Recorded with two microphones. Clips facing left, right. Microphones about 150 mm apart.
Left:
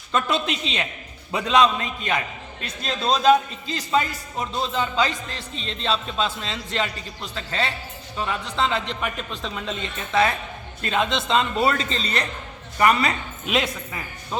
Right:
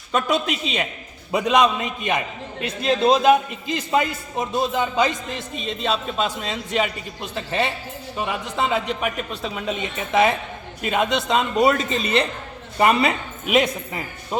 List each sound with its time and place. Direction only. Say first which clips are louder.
0.1 s a man's voice: right 2 dB; 10° right (ahead or behind)